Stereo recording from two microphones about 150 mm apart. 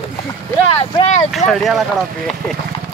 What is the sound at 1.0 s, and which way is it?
Speech, 40° left (ahead or behind).